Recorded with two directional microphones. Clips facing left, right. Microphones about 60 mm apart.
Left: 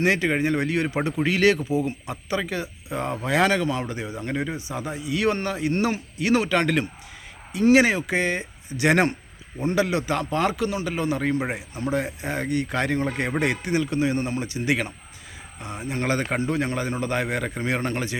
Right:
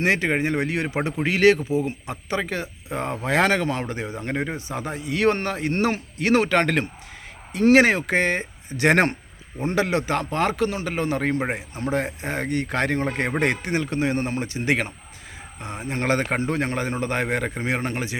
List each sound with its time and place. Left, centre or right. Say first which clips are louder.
0.0 s a man's voice: even; right